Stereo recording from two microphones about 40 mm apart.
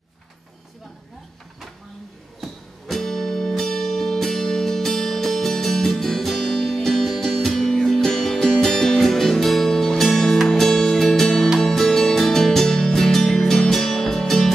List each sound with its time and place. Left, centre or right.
2.4 s music: centre